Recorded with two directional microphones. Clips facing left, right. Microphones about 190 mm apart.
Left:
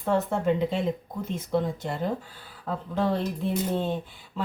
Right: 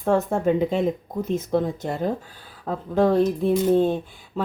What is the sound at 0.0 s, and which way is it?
Speech, 45° right (ahead or behind).